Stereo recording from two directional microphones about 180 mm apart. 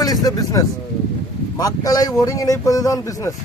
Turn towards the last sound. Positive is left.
turn(degrees=20)  # may be behind; listen again after turning